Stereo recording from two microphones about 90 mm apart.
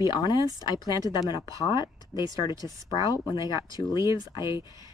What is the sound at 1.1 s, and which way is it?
Speech, 50° left (ahead or behind).